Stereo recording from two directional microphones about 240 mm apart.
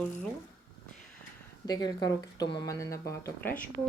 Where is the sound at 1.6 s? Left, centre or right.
Centre.